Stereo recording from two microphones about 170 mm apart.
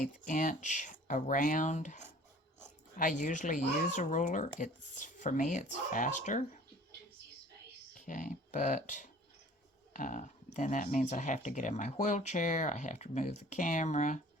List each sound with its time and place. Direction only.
0.0 s speech: 50° left (ahead or behind)
7.9 s speech: 50° left (ahead or behind)